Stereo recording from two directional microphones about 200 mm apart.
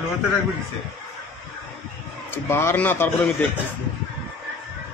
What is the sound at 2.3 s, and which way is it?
A man's voice, 10° left (ahead or behind).